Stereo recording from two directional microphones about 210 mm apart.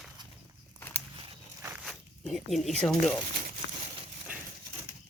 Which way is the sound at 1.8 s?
Centre (ahead or behind).